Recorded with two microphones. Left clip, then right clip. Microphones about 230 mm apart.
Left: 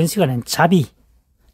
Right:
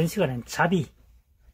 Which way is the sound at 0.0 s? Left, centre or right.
Left.